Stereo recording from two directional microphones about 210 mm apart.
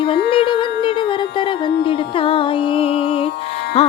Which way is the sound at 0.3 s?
25° left (ahead or behind).